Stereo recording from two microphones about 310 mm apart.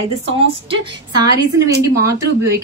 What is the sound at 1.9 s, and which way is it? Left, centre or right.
Speech, centre.